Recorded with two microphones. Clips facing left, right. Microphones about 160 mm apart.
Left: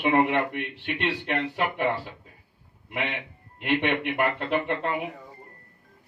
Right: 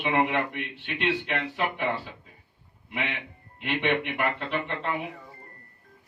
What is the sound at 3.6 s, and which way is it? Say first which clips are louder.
A man's voice: left 2 dB; 45° left (ahead or behind).